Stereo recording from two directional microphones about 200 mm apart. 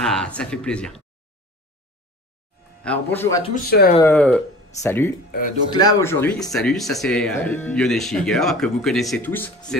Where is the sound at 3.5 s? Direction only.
50° left (ahead or behind).